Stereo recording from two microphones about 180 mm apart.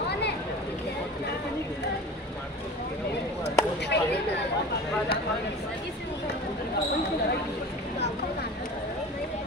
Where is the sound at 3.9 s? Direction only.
70° left (ahead or behind).